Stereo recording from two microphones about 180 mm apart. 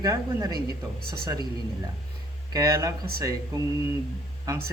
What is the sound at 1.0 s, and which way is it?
Speech, 60° right (ahead or behind).